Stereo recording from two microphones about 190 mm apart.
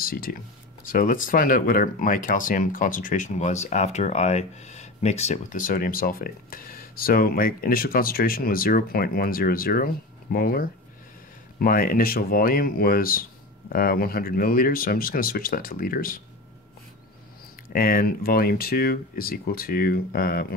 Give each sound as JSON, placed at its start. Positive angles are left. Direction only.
{"t": 0.0, "sound": "speech", "side_deg": 50}
{"t": 17.7, "sound": "speech", "side_deg": 50}